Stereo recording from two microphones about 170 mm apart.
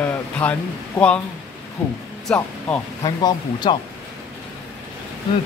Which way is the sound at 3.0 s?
25° left (ahead or behind).